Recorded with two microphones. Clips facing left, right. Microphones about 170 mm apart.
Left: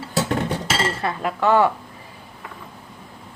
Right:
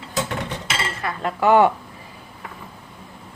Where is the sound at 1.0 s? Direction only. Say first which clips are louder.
Left 3 dB; 30° left (ahead or behind).